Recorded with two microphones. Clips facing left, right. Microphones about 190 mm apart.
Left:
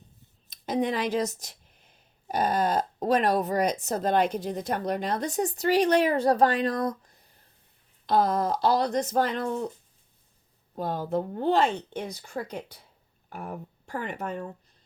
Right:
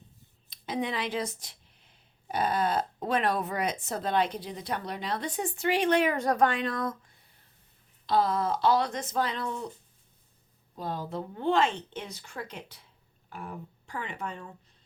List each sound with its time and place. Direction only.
0.5 s speech: 40° left (ahead or behind)
10.8 s speech: 50° left (ahead or behind)
11.4 s speech: 35° left (ahead or behind)